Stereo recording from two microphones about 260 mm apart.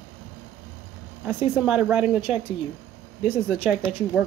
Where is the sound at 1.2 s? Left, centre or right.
Centre.